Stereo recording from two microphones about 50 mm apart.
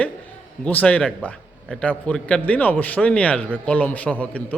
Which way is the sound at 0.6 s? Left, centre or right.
Left.